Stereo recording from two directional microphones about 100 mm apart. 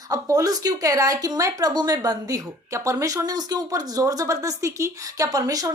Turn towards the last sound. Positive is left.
turn(degrees=-40)  # may be behind; listen again after turning